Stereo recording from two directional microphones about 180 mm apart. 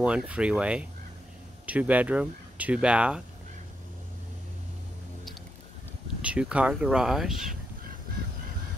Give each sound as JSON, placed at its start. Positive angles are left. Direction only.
{"t": 0.0, "sound": "speech", "side_deg": -5}
{"t": 6.2, "sound": "speech", "side_deg": -5}